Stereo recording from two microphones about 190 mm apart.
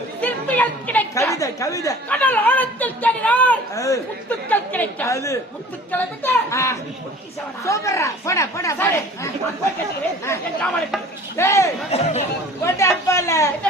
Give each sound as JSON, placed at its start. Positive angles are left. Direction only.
{"t": 0.2, "sound": "a woman's voice", "side_deg": 10}
{"t": 11.9, "sound": "speech", "side_deg": 35}
{"t": 12.6, "sound": "a woman's voice", "side_deg": 15}